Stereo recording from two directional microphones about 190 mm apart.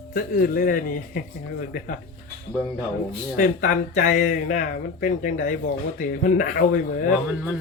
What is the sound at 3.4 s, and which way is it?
Speech, 45° left (ahead or behind).